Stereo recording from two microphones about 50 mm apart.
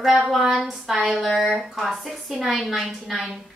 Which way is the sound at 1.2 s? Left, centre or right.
Centre.